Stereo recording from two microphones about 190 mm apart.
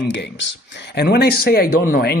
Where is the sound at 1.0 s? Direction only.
55° left (ahead or behind).